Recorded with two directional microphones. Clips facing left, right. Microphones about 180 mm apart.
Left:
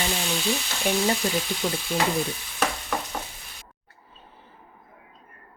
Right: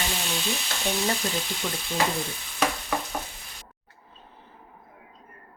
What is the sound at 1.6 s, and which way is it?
Speech, 10° left (ahead or behind).